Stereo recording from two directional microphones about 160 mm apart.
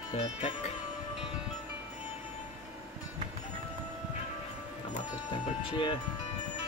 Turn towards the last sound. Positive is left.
turn(degrees=30)  # may be behind; listen again after turning